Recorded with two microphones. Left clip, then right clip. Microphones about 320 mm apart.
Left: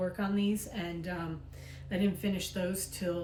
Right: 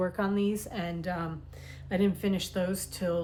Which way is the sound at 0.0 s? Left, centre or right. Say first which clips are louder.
Right 4 dB; centre.